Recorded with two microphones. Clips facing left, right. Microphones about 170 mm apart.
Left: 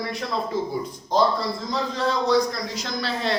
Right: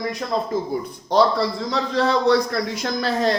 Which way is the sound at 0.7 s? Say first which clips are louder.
Right 4 dB; 65° right (ahead or behind).